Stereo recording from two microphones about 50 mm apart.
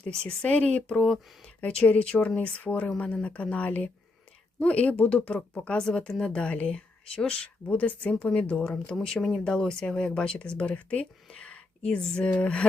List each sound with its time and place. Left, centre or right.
0.1 s speech: centre
9.0 s speech: centre